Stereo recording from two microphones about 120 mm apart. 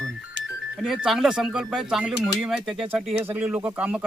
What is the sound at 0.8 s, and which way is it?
Speech, 5° right (ahead or behind).